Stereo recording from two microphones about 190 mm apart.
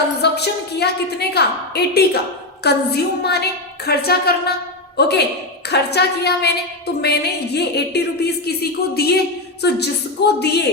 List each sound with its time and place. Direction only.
0.2 s a woman's voice: 60° left (ahead or behind)